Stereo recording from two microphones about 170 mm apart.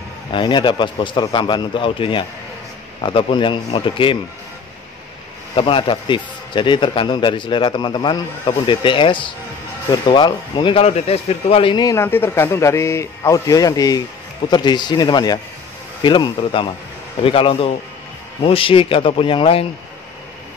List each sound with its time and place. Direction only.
0.3 s speech: 25° left (ahead or behind)
5.6 s speech: 30° left (ahead or behind)